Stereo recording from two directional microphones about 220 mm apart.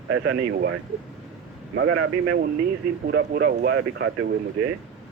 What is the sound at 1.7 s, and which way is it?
Speech, 60° right (ahead or behind).